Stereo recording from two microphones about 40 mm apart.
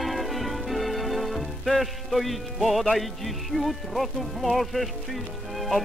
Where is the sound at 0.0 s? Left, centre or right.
Centre.